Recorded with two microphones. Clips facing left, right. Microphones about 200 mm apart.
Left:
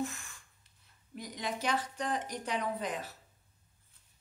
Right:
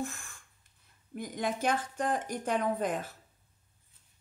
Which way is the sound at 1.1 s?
50° right (ahead or behind).